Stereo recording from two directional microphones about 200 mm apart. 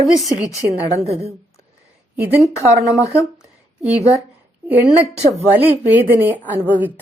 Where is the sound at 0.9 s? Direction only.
30° right (ahead or behind).